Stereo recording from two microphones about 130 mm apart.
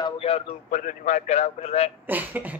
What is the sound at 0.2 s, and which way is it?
Speech, 50° left (ahead or behind).